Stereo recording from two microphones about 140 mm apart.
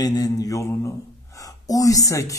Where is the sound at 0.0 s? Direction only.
25° left (ahead or behind).